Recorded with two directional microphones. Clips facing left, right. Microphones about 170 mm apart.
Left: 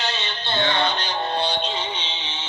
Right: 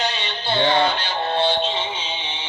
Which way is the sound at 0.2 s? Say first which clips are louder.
Right 3 dB; 10° right (ahead or behind).